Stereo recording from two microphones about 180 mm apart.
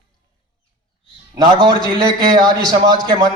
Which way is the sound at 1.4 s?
25° right (ahead or behind).